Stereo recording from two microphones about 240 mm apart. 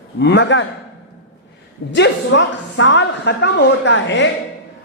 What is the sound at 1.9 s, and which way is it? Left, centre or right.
Speech, left.